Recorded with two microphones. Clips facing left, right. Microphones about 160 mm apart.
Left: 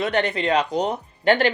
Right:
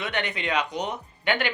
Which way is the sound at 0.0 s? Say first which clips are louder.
Left 8 dB; 35° left (ahead or behind).